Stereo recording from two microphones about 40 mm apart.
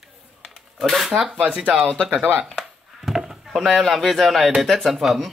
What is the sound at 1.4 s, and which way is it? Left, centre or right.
Speech, right.